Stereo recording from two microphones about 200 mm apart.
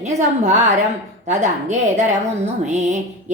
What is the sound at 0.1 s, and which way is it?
Speech, 35° right (ahead or behind).